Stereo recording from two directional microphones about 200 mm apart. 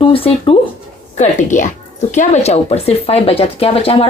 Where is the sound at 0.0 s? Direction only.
30° left (ahead or behind).